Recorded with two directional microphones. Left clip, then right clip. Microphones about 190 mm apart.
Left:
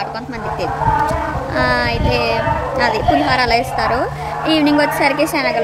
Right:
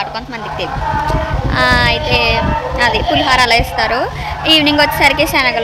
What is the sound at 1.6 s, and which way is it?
A woman's voice, 5° left (ahead or behind).